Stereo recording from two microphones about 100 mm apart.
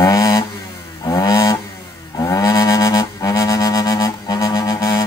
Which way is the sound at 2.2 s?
40° left (ahead or behind).